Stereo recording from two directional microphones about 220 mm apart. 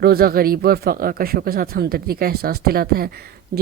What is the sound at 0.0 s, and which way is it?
Speech, 45° right (ahead or behind).